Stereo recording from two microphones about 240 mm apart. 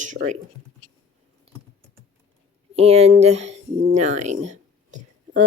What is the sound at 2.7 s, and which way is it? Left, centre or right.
Speech, right.